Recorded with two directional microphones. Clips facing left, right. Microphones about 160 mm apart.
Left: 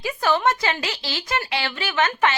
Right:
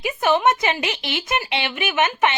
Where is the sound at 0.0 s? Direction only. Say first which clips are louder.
Right 3 dB; 20° right (ahead or behind).